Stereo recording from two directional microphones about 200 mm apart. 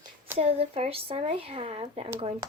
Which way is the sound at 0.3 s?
30° right (ahead or behind).